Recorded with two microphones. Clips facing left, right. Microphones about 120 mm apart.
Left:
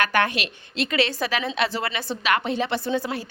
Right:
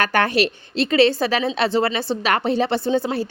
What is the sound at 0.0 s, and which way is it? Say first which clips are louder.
A woman's voice: right 4 dB; 35° right (ahead or behind).